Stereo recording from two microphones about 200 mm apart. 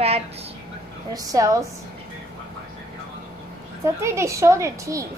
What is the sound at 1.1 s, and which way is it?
Speech, 15° right (ahead or behind).